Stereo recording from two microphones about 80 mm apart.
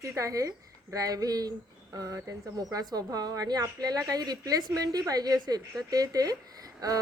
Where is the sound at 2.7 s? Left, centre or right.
Right.